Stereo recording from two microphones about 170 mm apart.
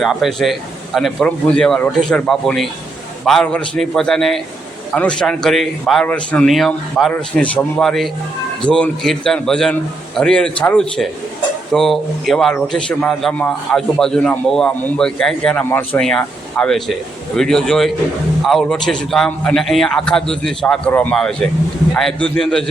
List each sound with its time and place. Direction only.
0.0 s a man's voice: centre (ahead or behind)